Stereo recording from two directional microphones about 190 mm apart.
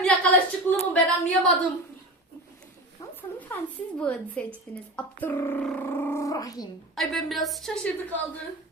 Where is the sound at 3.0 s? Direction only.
10° left (ahead or behind).